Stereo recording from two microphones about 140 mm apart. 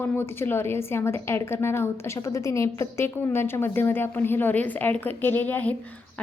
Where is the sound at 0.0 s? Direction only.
15° left (ahead or behind).